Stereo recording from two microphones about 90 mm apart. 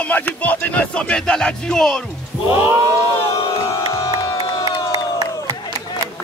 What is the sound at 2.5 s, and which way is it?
Speech, 30° right (ahead or behind).